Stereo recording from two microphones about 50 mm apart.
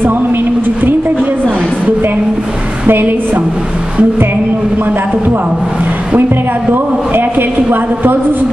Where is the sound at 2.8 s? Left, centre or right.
Right.